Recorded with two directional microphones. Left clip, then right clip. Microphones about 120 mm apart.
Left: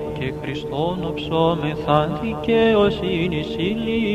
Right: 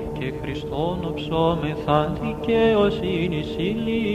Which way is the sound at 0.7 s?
35° left (ahead or behind).